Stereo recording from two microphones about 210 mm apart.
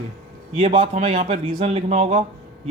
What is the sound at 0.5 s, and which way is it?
A man's voice, 25° right (ahead or behind).